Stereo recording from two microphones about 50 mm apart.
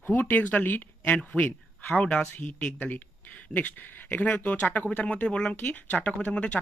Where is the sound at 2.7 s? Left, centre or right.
Left.